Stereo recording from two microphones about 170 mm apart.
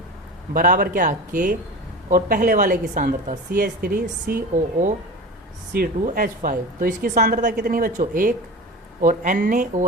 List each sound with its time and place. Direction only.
0.5 s a woman's voice: 50° right (ahead or behind)